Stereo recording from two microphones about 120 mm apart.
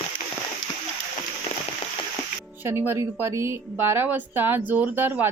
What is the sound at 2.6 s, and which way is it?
A woman's voice, 20° right (ahead or behind).